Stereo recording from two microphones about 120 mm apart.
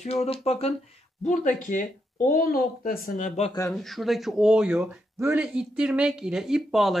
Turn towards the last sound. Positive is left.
turn(degrees=0)  # may be behind; listen again after turning